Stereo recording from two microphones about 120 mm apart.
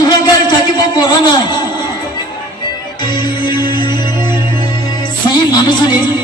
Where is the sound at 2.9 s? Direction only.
40° left (ahead or behind).